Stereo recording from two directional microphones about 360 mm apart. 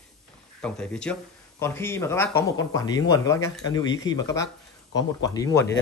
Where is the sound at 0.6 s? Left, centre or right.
Centre.